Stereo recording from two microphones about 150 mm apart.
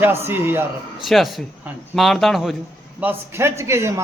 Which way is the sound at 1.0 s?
Centre (ahead or behind).